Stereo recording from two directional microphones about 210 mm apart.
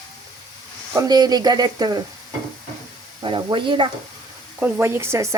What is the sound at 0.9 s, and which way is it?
Speech, 20° right (ahead or behind).